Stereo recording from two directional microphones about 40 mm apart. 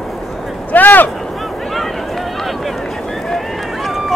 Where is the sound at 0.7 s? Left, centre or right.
Left.